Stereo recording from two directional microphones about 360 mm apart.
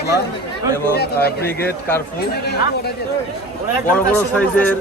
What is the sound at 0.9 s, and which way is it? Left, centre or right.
Speech, left.